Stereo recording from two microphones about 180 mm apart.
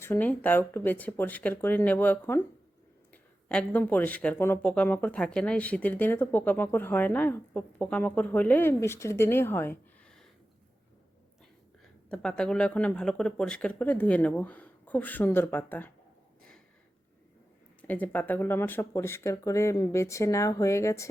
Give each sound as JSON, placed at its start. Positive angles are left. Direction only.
{"t": 0.0, "sound": "speech", "side_deg": 10}
{"t": 12.1, "sound": "speech", "side_deg": 5}
{"t": 17.8, "sound": "speech", "side_deg": 10}